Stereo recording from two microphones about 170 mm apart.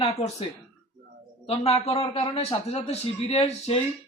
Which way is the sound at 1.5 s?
35° left (ahead or behind).